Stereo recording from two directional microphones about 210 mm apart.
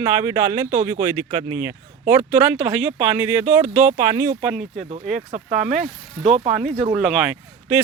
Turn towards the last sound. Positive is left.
turn(degrees=-5)  # may be behind; listen again after turning